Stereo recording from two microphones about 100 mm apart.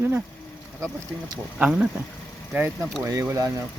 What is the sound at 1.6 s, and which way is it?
Speech, 10° right (ahead or behind).